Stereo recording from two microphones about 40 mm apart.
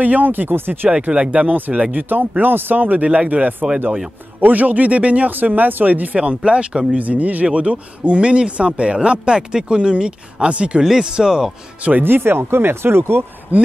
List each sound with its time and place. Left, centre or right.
0.0 s speech: right
1.1 s speech: right
5.3 s speech: right
6.1 s speech: right
7.0 s speech: right
10.8 s speech: centre
12.0 s speech: right
13.5 s speech: right